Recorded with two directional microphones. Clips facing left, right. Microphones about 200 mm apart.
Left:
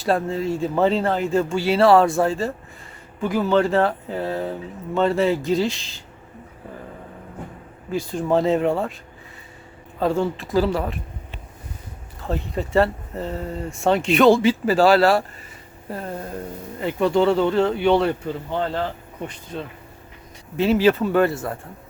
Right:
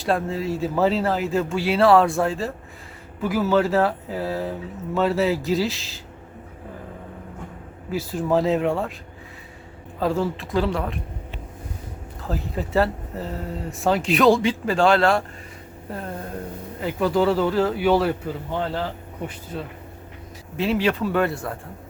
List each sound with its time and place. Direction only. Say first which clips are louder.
0.0 s speech: left 2 dB; centre (ahead or behind)
7.9 s speech: left 1 dB; 5° right (ahead or behind)
10.0 s speech: left 2 dB; centre (ahead or behind)
12.2 s speech: left 2 dB; centre (ahead or behind)